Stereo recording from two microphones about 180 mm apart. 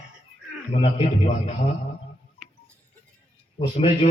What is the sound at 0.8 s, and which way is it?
Speech, 35° left (ahead or behind).